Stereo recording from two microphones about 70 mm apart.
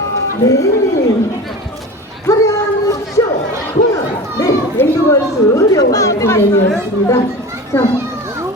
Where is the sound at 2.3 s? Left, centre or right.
Left.